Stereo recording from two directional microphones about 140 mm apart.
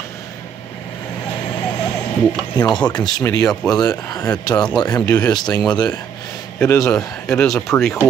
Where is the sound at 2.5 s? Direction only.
35° left (ahead or behind).